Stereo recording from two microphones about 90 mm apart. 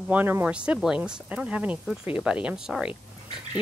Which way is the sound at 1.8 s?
Centre (ahead or behind).